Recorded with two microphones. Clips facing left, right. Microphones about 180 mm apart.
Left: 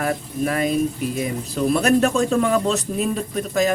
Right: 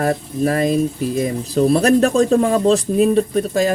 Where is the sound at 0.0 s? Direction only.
35° right (ahead or behind).